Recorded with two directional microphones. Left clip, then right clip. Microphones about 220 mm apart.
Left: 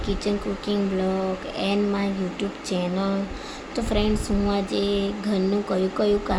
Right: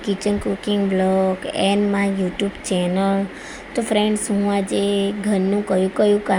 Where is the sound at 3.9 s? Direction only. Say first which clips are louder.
Right 5 dB; 15° right (ahead or behind).